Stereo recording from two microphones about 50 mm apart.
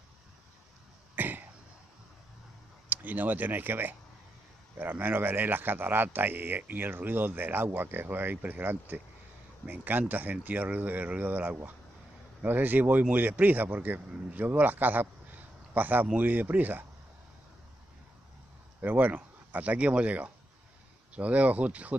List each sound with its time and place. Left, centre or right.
1.1 s cough: right
2.9 s a man's voice: right
18.8 s speech: right